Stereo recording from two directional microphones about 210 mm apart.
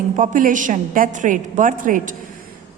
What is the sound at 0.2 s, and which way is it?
A woman's voice, 40° right (ahead or behind).